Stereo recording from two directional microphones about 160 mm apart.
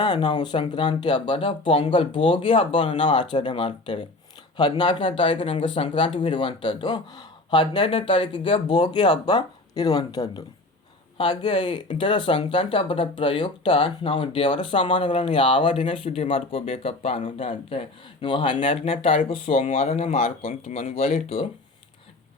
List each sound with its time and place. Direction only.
0.0 s speech: 25° left (ahead or behind)
19.2 s speech: 45° left (ahead or behind)